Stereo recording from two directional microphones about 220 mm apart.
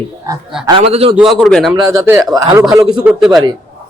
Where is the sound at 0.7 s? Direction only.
25° right (ahead or behind).